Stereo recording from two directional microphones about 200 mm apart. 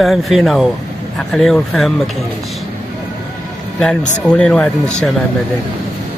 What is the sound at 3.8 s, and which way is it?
Speech, 5° left (ahead or behind).